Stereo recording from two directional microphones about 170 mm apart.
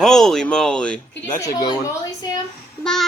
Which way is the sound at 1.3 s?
20° left (ahead or behind).